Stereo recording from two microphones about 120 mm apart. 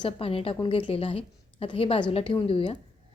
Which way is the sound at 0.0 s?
50° left (ahead or behind).